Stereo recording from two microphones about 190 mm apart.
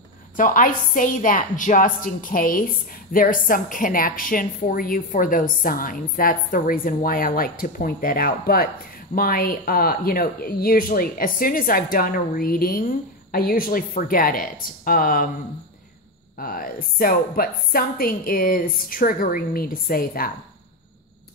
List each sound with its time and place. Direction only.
0.4 s a woman's voice: 45° left (ahead or behind)
16.3 s a woman's voice: 50° left (ahead or behind)